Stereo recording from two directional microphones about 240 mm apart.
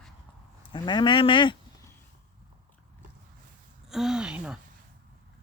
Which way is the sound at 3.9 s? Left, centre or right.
Centre.